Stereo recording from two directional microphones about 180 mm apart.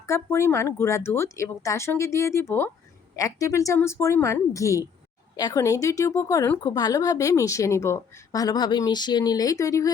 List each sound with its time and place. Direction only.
0.0 s speech: 15° left (ahead or behind)